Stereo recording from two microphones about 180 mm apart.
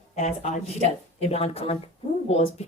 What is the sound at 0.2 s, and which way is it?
A woman's voice, 40° left (ahead or behind).